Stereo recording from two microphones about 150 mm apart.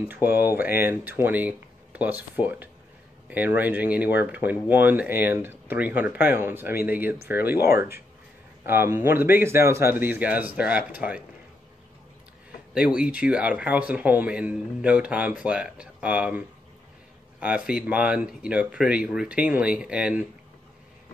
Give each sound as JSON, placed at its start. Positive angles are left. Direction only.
{"t": 0.4, "sound": "a man's voice", "side_deg": -15}
{"t": 12.7, "sound": "a man's voice", "side_deg": -5}